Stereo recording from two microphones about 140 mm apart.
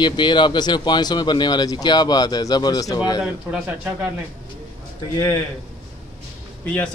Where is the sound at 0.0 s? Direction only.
35° left (ahead or behind).